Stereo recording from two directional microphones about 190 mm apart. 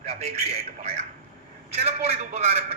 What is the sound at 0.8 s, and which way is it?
Speech, 35° right (ahead or behind).